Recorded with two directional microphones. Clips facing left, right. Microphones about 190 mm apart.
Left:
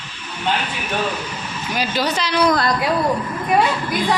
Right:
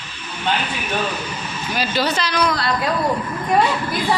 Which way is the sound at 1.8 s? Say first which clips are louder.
Even; 15° left (ahead or behind).